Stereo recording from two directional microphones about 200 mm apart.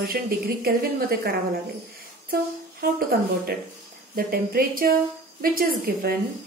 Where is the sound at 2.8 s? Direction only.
50° right (ahead or behind).